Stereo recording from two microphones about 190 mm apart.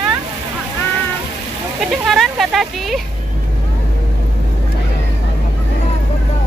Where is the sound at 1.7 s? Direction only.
Centre (ahead or behind).